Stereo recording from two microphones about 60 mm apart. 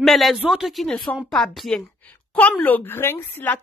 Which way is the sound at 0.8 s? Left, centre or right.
Centre.